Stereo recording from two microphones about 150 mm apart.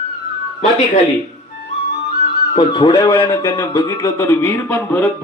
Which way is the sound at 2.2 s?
40° left (ahead or behind).